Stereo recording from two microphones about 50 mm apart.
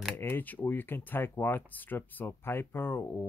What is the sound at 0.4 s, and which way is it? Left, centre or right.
Speech, left.